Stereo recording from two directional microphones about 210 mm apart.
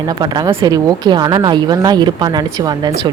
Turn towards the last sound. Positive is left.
turn(degrees=-20)  # may be behind; listen again after turning